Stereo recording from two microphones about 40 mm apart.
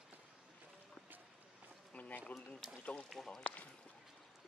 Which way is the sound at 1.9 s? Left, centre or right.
Left.